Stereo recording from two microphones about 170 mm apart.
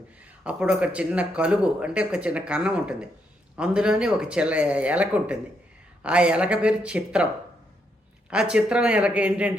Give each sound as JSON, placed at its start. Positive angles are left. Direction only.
{"t": 0.4, "sound": "speech", "side_deg": -5}
{"t": 8.3, "sound": "speech", "side_deg": -5}